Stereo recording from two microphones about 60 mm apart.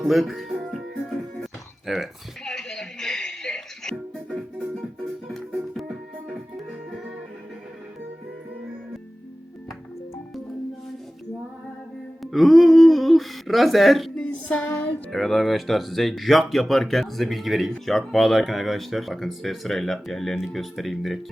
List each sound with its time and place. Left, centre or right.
0.0 s music: centre
1.9 s speech: centre
2.4 s music: centre
12.2 s humming: centre
14.2 s music: left
15.1 s speech: centre